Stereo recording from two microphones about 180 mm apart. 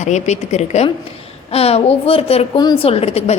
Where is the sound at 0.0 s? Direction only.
40° left (ahead or behind).